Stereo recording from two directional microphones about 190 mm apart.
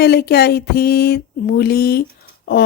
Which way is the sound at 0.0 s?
55° left (ahead or behind).